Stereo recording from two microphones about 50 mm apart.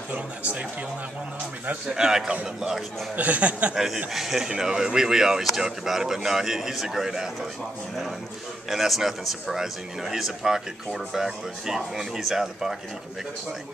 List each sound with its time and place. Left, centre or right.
0.1 s speech: right
2.0 s speech: centre
3.2 s speech: right
3.7 s speech: centre
8.6 s speech: centre